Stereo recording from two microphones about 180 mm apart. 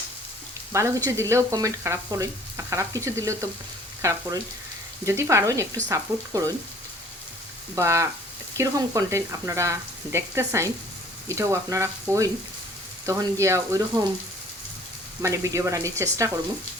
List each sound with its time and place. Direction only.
0.7 s frying: 15° right (ahead or behind)
7.8 s frying: 15° right (ahead or behind)
15.2 s frying: 15° right (ahead or behind)